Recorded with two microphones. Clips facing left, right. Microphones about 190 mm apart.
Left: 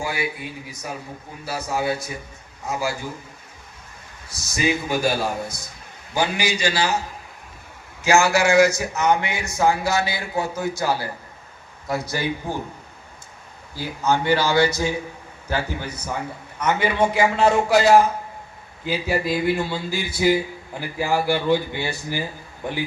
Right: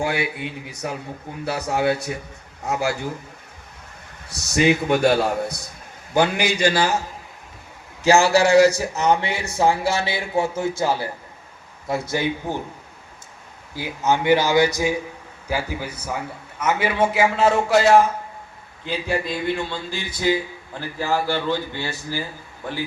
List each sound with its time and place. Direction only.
0.0 s a man's voice: 65° right (ahead or behind)
4.3 s a man's voice: 65° right (ahead or behind); by 7.0 s 50° right (ahead or behind)
8.0 s a man's voice: 35° right (ahead or behind)
13.7 s a man's voice: 20° right (ahead or behind); by 22.8 s 15° left (ahead or behind)